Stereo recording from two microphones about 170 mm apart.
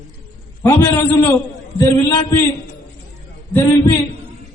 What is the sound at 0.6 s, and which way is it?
A man's voice, 15° left (ahead or behind).